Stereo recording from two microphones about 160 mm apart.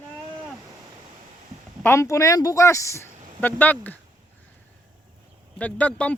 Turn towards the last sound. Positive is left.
turn(degrees=10)  # may be behind; listen again after turning